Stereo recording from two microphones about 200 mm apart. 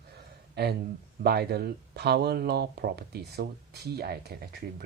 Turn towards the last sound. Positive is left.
turn(degrees=-50)  # may be behind; listen again after turning